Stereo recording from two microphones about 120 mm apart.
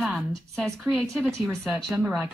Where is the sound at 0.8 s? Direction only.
10° right (ahead or behind).